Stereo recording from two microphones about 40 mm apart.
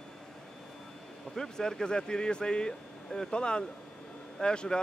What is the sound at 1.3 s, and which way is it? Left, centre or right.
Speech, centre.